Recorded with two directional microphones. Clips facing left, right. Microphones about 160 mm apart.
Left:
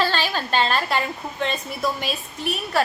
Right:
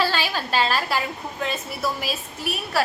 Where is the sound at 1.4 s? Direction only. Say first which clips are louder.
Left 2 dB; 5° right (ahead or behind).